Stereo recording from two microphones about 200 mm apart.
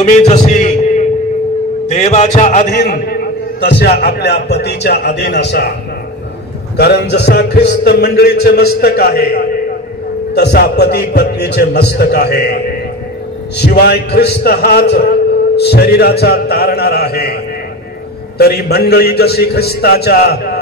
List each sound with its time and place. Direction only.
0.0 s a sound: 35° left (ahead or behind)
1.9 s speech: 35° left (ahead or behind)
2.7 s a man's voice: 50° left (ahead or behind)
6.8 s a man's voice: 55° left (ahead or behind)
13.6 s speech: 50° left (ahead or behind)
18.4 s speech: 50° left (ahead or behind)